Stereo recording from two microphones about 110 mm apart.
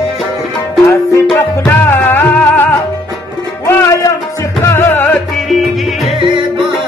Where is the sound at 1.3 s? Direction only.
20° left (ahead or behind).